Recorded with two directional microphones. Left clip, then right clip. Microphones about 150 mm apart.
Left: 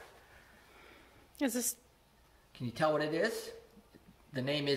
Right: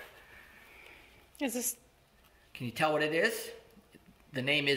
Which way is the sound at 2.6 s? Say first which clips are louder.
Right 2 dB; 5° left (ahead or behind).